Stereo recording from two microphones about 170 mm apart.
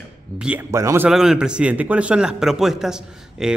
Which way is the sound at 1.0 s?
5° right (ahead or behind).